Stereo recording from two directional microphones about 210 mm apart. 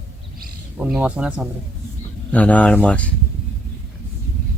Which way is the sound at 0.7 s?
5° right (ahead or behind).